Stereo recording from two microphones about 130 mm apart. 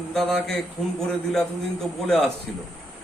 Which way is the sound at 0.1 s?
5° left (ahead or behind).